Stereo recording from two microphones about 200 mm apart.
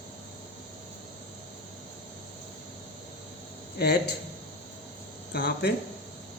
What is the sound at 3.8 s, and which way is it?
Speech, 55° left (ahead or behind).